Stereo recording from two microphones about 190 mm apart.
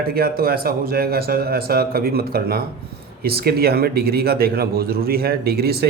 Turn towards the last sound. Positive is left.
turn(degrees=-55)  # may be behind; listen again after turning